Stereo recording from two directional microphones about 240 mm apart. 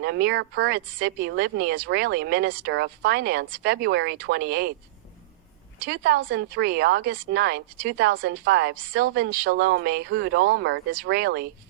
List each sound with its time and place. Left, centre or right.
0.0 s speech: right
5.8 s speech: right